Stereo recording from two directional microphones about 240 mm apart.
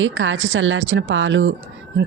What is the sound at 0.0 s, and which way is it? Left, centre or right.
Speech, right.